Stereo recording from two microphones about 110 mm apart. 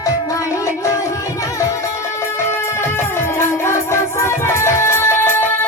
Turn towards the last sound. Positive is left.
turn(degrees=20)  # may be behind; listen again after turning